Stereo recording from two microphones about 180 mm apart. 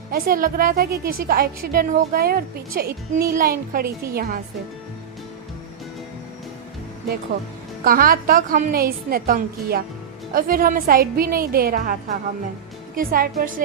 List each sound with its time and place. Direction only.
0.1 s a woman's voice: 50° right (ahead or behind)
7.9 s a woman's voice: 55° right (ahead or behind)